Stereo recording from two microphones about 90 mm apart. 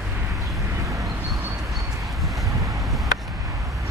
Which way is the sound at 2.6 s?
35° right (ahead or behind).